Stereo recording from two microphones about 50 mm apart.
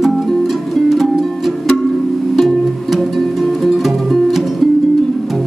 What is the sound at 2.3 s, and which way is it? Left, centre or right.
Music, centre.